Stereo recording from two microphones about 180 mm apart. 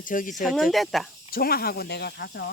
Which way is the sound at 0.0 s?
50° left (ahead or behind).